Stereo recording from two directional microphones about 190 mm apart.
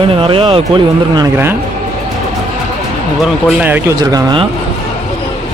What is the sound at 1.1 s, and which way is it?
Speech, 10° right (ahead or behind).